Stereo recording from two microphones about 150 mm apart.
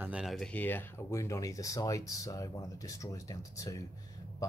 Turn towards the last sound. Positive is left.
turn(degrees=20)  # may be behind; listen again after turning